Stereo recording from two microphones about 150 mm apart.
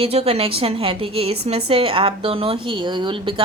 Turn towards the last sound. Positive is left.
turn(degrees=-35)  # may be behind; listen again after turning